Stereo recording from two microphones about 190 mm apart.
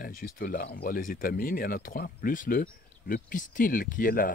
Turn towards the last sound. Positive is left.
turn(degrees=45)  # may be behind; listen again after turning